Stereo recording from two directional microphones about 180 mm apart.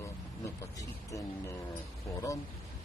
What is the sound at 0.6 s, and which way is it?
Speech, 20° left (ahead or behind).